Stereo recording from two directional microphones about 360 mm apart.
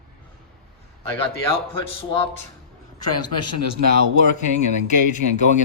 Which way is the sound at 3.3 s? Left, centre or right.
Left.